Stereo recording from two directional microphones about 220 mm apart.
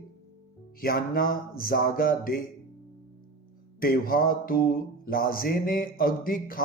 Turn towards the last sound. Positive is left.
turn(degrees=40)  # may be behind; listen again after turning